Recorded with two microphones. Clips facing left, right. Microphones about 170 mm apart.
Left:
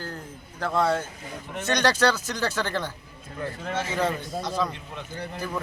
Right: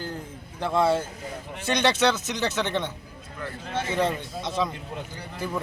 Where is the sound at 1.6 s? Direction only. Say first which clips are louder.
Even; 25° right (ahead or behind).